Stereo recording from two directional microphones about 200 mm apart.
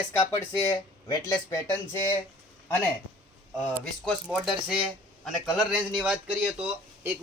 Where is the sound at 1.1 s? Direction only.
20° left (ahead or behind).